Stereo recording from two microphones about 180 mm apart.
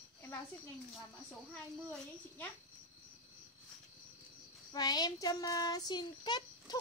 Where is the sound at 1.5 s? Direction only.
5° left (ahead or behind).